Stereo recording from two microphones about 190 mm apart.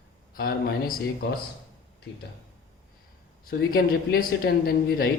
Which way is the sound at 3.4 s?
50° left (ahead or behind).